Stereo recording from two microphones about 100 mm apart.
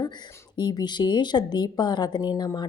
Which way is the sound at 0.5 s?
45° left (ahead or behind).